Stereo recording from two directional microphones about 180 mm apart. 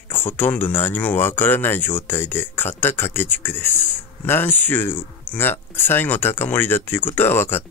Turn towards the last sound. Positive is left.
turn(degrees=10)  # may be behind; listen again after turning